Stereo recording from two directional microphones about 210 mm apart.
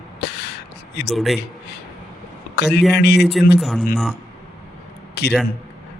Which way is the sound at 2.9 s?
50° left (ahead or behind).